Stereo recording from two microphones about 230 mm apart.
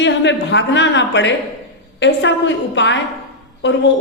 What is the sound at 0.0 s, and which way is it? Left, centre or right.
A man's voice, left.